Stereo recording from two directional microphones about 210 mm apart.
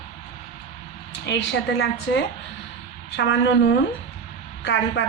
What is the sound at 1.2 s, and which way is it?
A woman's voice, 55° left (ahead or behind).